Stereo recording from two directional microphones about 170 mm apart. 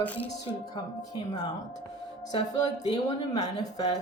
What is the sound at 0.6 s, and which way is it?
Speech, 20° left (ahead or behind).